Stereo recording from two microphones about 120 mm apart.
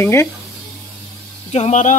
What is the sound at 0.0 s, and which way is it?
Speech, 20° left (ahead or behind).